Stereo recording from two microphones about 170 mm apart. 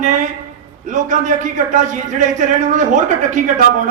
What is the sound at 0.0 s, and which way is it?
A man's voice, 45° right (ahead or behind).